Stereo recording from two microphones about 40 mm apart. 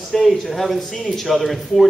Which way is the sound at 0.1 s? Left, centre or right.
Centre.